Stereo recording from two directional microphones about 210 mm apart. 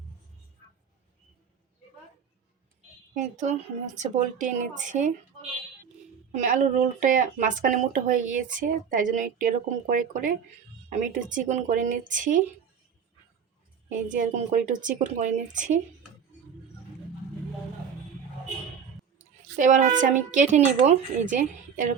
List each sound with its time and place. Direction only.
3.3 s speech: 35° right (ahead or behind)
6.3 s speech: 35° right (ahead or behind)
14.1 s speech: 40° right (ahead or behind)
19.5 s speech: 35° right (ahead or behind)